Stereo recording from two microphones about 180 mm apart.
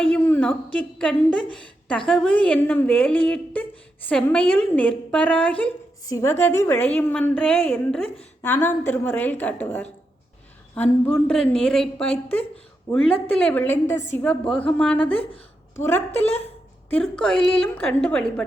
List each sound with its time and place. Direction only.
0.1 s a woman's voice: 10° left (ahead or behind)
15.2 s a woman's voice: 30° left (ahead or behind)
15.7 s a woman's voice: 15° left (ahead or behind)